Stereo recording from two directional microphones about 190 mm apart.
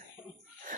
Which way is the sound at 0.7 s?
45° right (ahead or behind).